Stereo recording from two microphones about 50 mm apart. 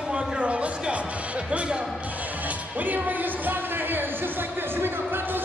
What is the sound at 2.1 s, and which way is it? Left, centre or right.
Music, right.